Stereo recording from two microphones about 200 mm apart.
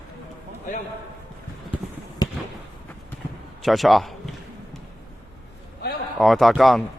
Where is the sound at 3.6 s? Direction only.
Centre (ahead or behind).